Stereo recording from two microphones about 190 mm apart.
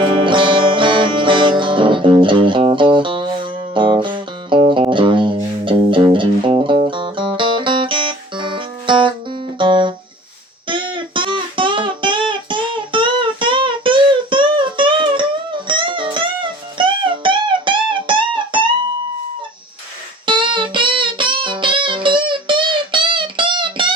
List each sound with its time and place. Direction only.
0.0 s music: 25° right (ahead or behind)
20.2 s music: 25° right (ahead or behind)